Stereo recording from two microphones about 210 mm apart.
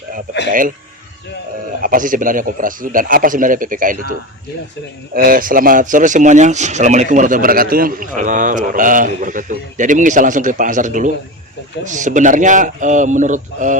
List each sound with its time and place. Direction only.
1.8 s a man's voice: 40° right (ahead or behind)
5.1 s a man's voice: 45° right (ahead or behind)